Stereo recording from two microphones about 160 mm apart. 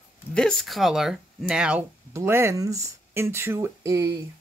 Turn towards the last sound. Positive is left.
turn(degrees=-20)  # may be behind; listen again after turning